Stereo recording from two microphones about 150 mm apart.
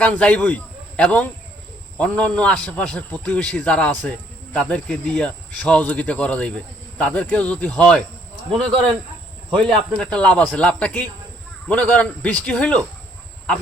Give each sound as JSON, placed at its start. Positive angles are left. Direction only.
{"t": 0.0, "sound": "a man's voice", "side_deg": 10}
{"t": 9.6, "sound": "a man's voice", "side_deg": 5}